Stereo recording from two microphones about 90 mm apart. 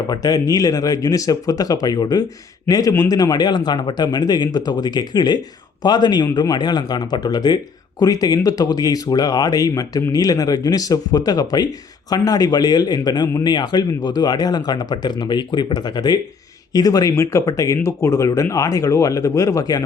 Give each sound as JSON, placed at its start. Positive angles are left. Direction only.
{"t": 0.1, "sound": "speech", "side_deg": 45}